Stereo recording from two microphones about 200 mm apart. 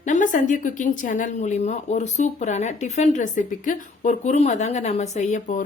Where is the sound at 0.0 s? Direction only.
40° left (ahead or behind).